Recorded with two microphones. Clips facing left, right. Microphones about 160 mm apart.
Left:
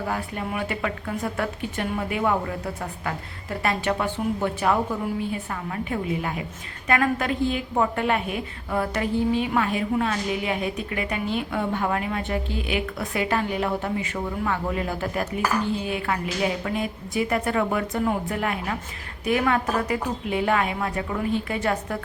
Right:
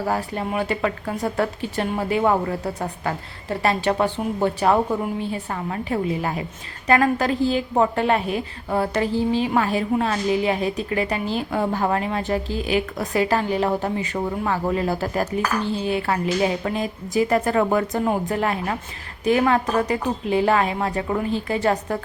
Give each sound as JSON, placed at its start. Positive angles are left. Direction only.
{"t": 0.1, "sound": "a woman's voice", "side_deg": -35}